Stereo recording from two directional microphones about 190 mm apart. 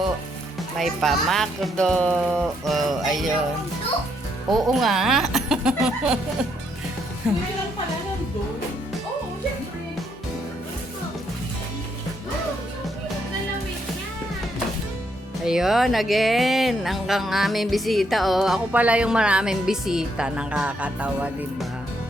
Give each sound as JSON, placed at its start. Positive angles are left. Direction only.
{"t": 0.8, "sound": "speech", "side_deg": 0}
{"t": 4.4, "sound": "speech", "side_deg": 0}
{"t": 15.4, "sound": "speech", "side_deg": 0}